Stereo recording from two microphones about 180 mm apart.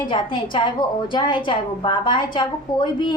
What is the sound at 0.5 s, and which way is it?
A woman's voice, 25° left (ahead or behind).